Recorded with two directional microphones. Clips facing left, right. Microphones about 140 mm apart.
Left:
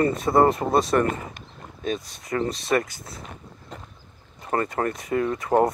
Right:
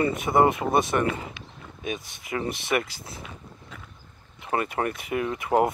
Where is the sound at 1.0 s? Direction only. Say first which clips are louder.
Left 2 dB; 45° left (ahead or behind).